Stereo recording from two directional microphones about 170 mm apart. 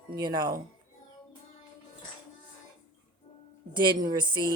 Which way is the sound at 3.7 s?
25° right (ahead or behind).